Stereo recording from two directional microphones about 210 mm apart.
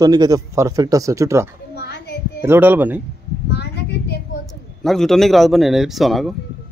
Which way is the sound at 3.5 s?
50° left (ahead or behind).